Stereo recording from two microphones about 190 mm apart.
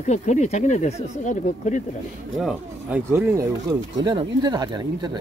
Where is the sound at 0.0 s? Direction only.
35° left (ahead or behind).